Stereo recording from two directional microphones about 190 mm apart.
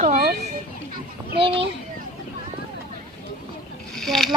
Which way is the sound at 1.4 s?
30° right (ahead or behind).